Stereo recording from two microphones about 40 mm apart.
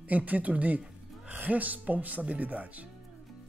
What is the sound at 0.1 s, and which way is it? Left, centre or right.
Speech, right.